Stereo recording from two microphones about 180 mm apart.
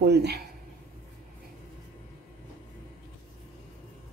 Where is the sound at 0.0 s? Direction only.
65° right (ahead or behind).